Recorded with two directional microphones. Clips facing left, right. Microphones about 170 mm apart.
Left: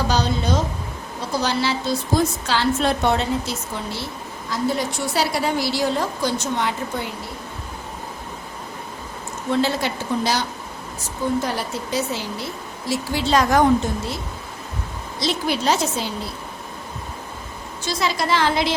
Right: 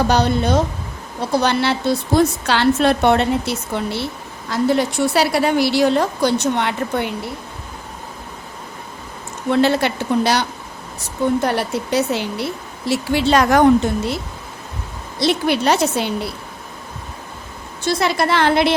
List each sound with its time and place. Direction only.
0.1 s a woman's voice: 60° right (ahead or behind)
9.5 s speech: 65° right (ahead or behind)
11.4 s a woman's voice: 65° right (ahead or behind)
15.2 s a woman's voice: 65° right (ahead or behind)
17.8 s a woman's voice: 60° right (ahead or behind)